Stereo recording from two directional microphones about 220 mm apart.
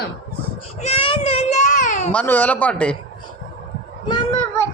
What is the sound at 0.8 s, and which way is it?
Child singing, 25° left (ahead or behind).